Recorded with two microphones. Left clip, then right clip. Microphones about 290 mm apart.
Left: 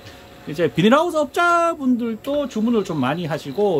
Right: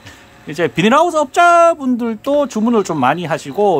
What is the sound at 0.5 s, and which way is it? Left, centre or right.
Speech, centre.